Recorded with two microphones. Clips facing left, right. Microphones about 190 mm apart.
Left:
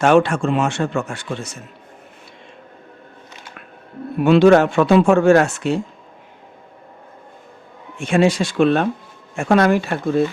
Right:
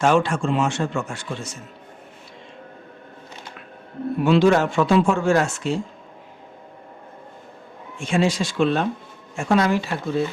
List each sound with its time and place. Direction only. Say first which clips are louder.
0.0 s speech: left 5 dB; 65° left (ahead or behind)
4.2 s speech: left 5 dB; 60° left (ahead or behind)
7.9 s speech: left 5 dB; 60° left (ahead or behind)